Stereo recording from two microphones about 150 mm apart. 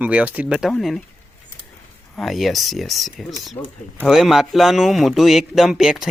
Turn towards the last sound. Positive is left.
turn(degrees=-5)  # may be behind; listen again after turning